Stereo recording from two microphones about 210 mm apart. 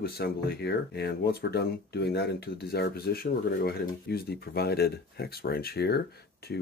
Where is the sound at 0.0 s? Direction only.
50° left (ahead or behind).